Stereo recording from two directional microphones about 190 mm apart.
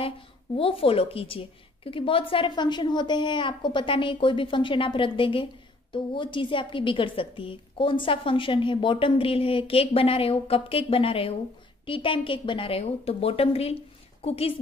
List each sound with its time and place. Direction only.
0.6 s a woman's voice: 30° left (ahead or behind)